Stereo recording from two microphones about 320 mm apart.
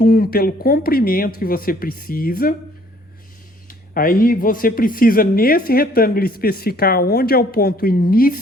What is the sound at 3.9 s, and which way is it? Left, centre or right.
A man's voice, left.